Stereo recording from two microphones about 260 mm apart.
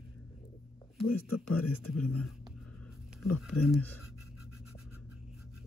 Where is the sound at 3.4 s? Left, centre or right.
Centre.